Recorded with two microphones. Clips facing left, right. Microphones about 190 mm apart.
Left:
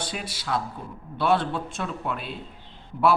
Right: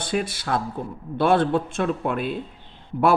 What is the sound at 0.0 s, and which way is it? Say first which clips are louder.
A man's voice: right 8 dB; 50° right (ahead or behind).